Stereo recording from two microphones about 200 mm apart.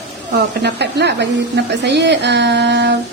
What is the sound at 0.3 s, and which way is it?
A woman's voice, 55° right (ahead or behind).